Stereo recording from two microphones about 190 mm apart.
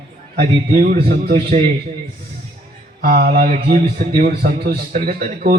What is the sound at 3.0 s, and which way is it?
A man's voice, 55° right (ahead or behind).